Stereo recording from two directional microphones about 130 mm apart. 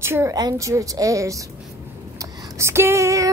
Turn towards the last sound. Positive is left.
turn(degrees=-25)  # may be behind; listen again after turning